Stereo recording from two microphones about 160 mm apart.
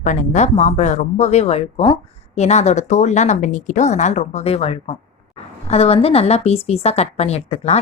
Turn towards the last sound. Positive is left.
turn(degrees=40)  # may be behind; listen again after turning